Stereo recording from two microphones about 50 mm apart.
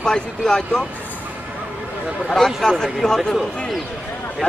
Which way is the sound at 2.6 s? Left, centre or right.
Centre.